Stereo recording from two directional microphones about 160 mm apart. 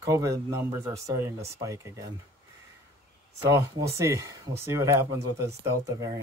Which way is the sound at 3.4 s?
20° right (ahead or behind).